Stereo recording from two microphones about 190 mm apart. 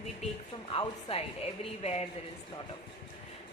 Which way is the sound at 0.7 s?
30° left (ahead or behind).